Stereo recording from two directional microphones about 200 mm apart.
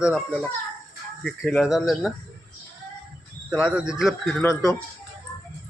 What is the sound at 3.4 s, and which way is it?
Speech, 5° right (ahead or behind).